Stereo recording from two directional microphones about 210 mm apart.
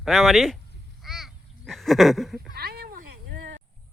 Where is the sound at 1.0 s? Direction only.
Centre (ahead or behind).